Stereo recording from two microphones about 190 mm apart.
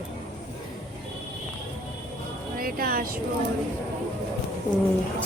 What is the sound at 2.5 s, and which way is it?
Speech, 50° right (ahead or behind).